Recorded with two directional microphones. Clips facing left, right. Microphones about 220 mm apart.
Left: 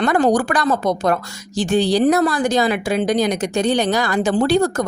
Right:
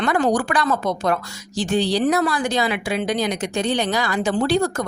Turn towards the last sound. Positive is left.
turn(degrees=40)  # may be behind; listen again after turning